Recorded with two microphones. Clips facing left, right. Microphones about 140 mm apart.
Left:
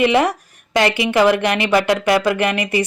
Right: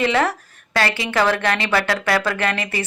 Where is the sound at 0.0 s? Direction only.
15° left (ahead or behind).